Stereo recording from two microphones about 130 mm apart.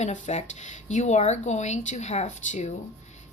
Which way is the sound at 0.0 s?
60° left (ahead or behind).